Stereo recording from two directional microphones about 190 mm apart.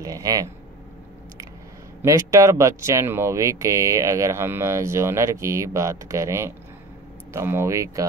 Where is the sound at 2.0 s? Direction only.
15° right (ahead or behind).